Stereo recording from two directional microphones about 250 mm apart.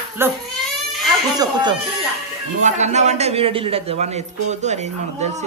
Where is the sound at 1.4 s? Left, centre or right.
Centre.